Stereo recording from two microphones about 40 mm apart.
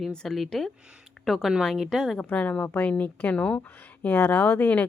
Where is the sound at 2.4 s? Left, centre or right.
Left.